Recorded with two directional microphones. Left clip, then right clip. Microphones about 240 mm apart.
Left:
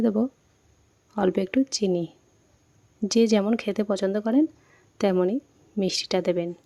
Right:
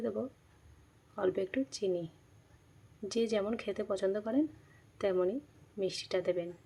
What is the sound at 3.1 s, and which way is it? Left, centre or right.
Speech, left.